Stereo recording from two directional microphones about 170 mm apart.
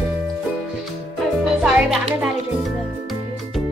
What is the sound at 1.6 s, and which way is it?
A child's voice, 5° right (ahead or behind).